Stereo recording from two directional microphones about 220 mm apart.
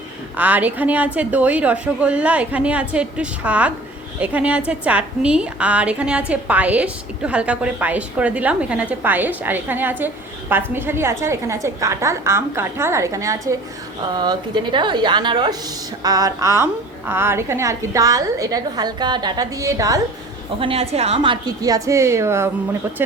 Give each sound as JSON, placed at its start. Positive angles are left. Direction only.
{"t": 0.3, "sound": "a woman's voice", "side_deg": -5}
{"t": 20.6, "sound": "a woman's voice", "side_deg": -25}